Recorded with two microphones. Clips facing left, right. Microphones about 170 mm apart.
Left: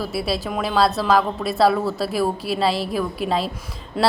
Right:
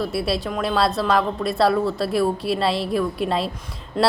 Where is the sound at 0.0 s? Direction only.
Centre (ahead or behind).